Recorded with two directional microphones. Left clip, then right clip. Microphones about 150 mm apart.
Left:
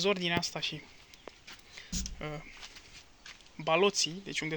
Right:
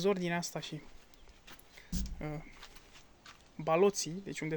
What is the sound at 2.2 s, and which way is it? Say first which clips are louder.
Speech: left 1 dB; 15° right (ahead or behind).